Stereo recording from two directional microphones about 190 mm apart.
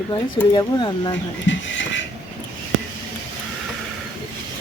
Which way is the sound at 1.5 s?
75° left (ahead or behind).